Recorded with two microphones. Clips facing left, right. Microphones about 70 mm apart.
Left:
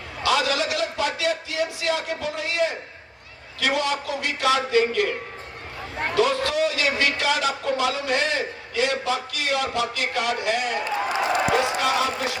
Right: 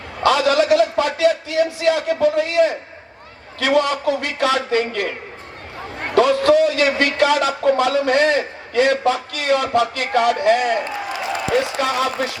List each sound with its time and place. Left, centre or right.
0.2 s speech: right
6.1 s speech: right